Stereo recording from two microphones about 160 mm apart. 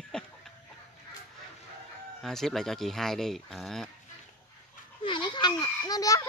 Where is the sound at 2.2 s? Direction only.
Centre (ahead or behind).